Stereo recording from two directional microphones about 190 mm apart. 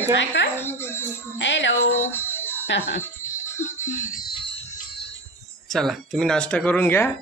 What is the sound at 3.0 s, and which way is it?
Music, 15° left (ahead or behind).